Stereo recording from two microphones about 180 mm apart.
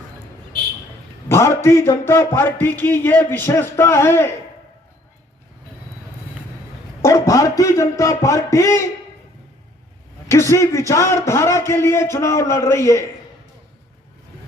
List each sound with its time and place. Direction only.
1.3 s speech: 15° left (ahead or behind)
7.0 s speech: 20° left (ahead or behind)
10.2 s speech: 15° left (ahead or behind)